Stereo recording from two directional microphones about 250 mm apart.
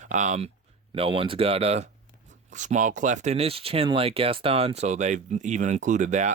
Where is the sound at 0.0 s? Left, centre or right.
Right.